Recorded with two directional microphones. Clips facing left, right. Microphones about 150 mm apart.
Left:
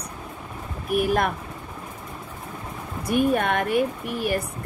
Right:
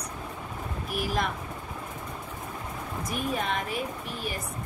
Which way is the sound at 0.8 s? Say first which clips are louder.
Left 8 dB; 60° left (ahead or behind).